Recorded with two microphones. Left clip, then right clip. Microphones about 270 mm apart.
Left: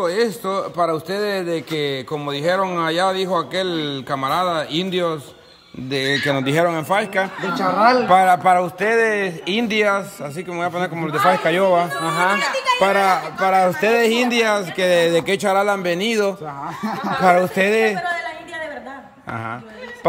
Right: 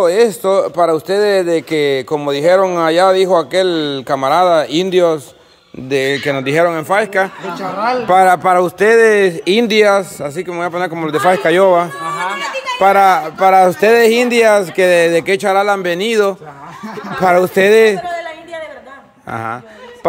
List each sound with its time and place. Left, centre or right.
0.0 s a man's voice: centre
12.0 s speech: left
12.7 s speech: centre
19.3 s a sound: centre